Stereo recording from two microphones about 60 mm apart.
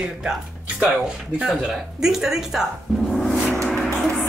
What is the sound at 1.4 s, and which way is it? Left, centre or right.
Speech, centre.